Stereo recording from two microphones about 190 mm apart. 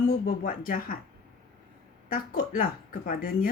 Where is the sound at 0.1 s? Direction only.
50° left (ahead or behind).